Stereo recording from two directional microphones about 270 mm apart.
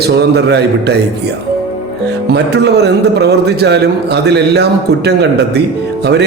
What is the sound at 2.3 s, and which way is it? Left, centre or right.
A man's voice, right.